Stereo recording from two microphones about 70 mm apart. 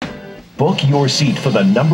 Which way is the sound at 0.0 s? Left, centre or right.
Centre.